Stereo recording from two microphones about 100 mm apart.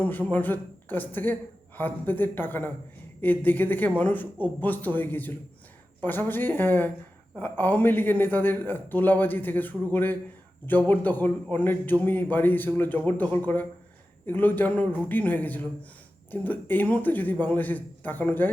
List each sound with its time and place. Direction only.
0.0 s a man's voice: 15° left (ahead or behind)